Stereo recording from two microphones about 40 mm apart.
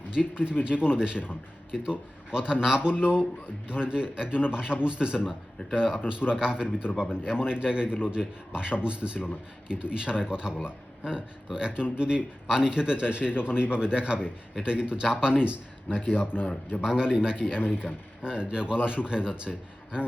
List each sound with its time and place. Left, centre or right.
0.1 s a man's voice: right